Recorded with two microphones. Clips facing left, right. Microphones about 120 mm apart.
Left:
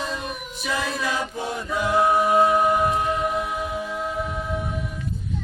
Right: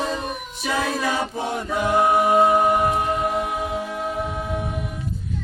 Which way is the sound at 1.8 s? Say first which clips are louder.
Right 1 dB; 20° right (ahead or behind).